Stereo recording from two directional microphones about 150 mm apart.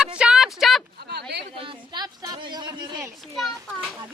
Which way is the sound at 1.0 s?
90° right.